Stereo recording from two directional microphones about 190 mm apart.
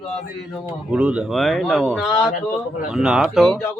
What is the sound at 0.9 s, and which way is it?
Speech, 5° right (ahead or behind).